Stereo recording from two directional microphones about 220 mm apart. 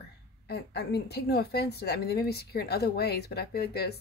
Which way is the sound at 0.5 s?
50° left (ahead or behind).